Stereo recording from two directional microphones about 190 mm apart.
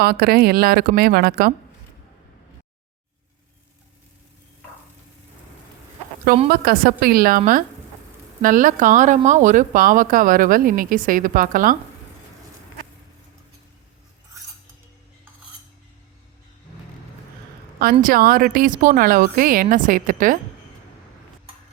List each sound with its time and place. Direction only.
0.0 s speech: 55° right (ahead or behind)
6.5 s speech: 50° right (ahead or behind)
18.0 s speech: 50° right (ahead or behind)